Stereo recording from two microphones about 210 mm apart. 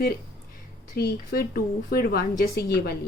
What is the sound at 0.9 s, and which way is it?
A woman's voice, 45° left (ahead or behind).